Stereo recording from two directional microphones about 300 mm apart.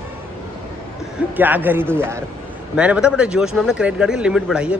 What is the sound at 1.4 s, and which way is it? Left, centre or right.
A man's voice, centre.